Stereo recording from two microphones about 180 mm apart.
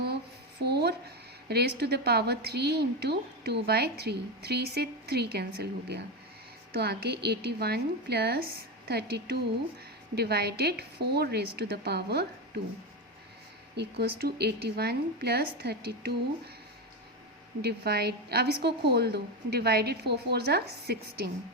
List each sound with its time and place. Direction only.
0.6 s a woman's voice: 65° right (ahead or behind)
13.7 s a woman's voice: 65° right (ahead or behind)
17.6 s a woman's voice: 60° right (ahead or behind)